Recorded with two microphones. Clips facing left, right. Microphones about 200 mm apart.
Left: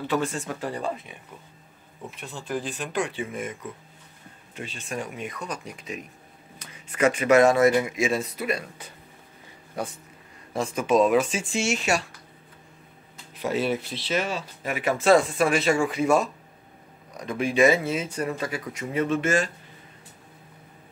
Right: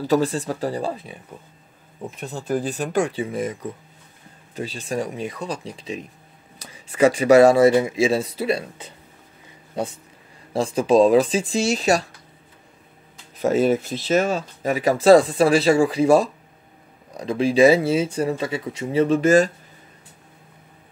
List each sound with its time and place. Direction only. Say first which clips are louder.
0.0 s speech: right 7 dB; 35° right (ahead or behind)
10.5 s speech: right 5 dB; 30° right (ahead or behind)
13.4 s speech: right 7 dB; 45° right (ahead or behind)